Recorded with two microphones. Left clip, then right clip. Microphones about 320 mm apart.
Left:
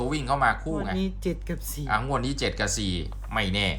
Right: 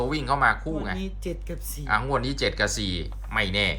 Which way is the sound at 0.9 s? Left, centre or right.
Left.